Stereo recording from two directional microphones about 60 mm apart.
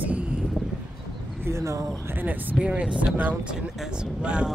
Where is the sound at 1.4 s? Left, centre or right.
Right.